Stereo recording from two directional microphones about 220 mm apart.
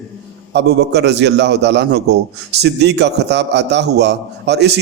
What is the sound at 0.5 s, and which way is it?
A man's voice, 50° right (ahead or behind).